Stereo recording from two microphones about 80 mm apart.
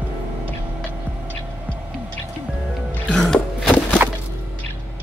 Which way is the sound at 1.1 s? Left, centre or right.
Right.